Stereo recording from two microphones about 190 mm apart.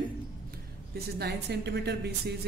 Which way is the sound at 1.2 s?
60° right (ahead or behind).